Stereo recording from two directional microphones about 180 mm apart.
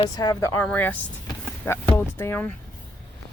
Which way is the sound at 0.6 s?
10° left (ahead or behind).